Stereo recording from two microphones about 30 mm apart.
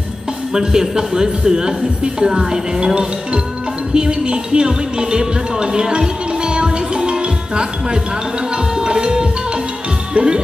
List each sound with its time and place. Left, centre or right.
0.5 s speech: right
8.8 s music: right
10.1 s speech: right